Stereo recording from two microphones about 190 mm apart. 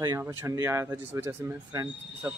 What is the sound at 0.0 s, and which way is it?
A man's voice, 15° right (ahead or behind).